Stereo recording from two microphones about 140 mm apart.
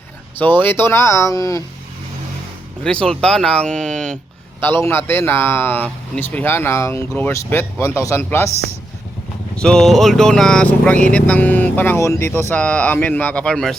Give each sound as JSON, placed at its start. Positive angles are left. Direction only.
{"t": 0.3, "sound": "speech", "side_deg": 15}
{"t": 2.8, "sound": "speech", "side_deg": 5}
{"t": 9.6, "sound": "speech", "side_deg": 5}